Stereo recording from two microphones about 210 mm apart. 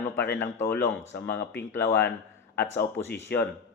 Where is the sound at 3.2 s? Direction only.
50° left (ahead or behind).